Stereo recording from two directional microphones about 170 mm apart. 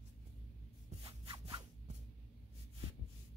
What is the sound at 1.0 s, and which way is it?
Zipper, 25° right (ahead or behind).